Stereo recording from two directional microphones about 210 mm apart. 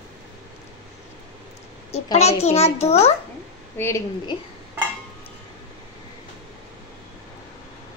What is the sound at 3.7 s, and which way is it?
Speech, 15° left (ahead or behind).